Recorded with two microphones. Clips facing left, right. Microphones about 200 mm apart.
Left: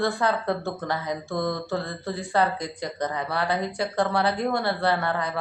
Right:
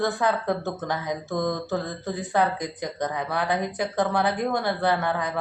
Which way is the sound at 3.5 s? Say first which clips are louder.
Right 1 dB; 20° right (ahead or behind).